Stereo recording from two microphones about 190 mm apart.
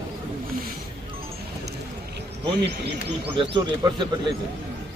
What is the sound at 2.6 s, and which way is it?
Speech, 60° right (ahead or behind).